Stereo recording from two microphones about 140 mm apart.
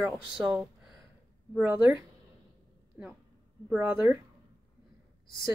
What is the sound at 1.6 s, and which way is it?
Speech, 10° right (ahead or behind).